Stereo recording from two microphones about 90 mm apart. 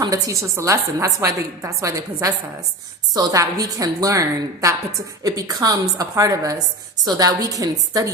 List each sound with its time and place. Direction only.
0.1 s a woman's voice: 35° right (ahead or behind)